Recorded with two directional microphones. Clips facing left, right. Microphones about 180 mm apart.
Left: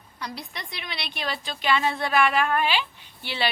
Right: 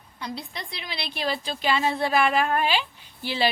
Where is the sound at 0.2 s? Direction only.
25° right (ahead or behind).